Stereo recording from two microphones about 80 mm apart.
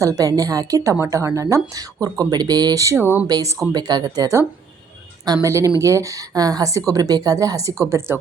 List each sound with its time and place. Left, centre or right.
0.0 s a woman's voice: right
3.7 s a woman's voice: right
5.5 s a woman's voice: right